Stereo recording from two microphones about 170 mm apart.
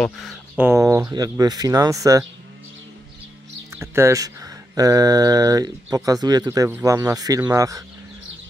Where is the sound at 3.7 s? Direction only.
15° right (ahead or behind).